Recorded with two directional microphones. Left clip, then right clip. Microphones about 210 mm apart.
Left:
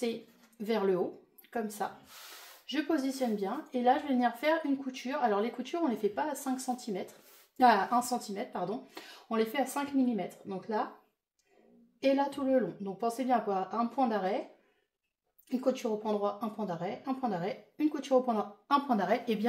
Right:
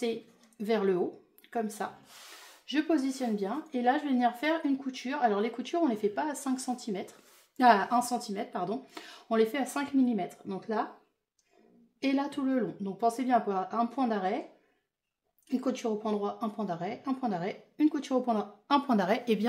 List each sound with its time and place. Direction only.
0.7 s a woman's voice: 40° right (ahead or behind)
12.0 s speech: 40° right (ahead or behind)
15.4 s a woman's voice: 40° right (ahead or behind)